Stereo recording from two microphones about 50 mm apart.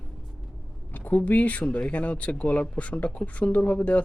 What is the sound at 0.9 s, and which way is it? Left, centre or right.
Speech, left.